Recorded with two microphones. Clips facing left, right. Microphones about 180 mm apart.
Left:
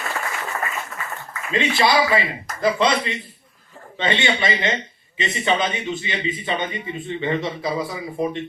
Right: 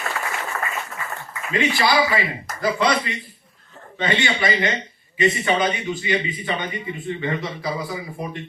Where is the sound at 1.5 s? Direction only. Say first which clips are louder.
Left 1 dB; 25° left (ahead or behind).